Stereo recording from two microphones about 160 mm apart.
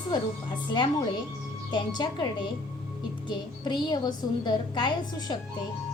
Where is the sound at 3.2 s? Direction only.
25° left (ahead or behind).